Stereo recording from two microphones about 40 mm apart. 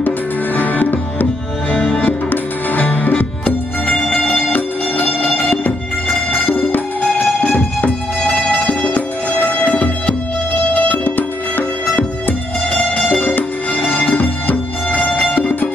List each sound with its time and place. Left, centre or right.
0.6 s music: left
1.7 s music: left
2.0 s music: left
4.1 s music: centre
4.5 s music: left
6.7 s music: left
7.2 s music: left
8.9 s music: left
11.1 s music: left
13.8 s music: left
14.1 s music: left
14.9 s music: left
15.3 s music: left